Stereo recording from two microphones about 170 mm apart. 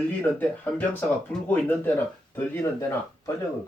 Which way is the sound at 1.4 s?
10° left (ahead or behind).